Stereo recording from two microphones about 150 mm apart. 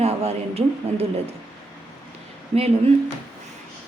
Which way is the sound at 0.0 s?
45° right (ahead or behind).